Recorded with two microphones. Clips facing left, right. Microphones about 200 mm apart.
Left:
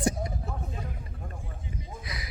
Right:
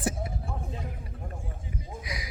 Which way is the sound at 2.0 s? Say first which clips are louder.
Right 2 dB; 10° right (ahead or behind).